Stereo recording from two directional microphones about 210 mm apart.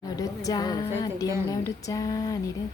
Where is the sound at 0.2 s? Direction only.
15° left (ahead or behind).